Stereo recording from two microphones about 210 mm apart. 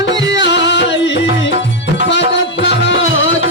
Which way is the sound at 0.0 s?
55° left (ahead or behind).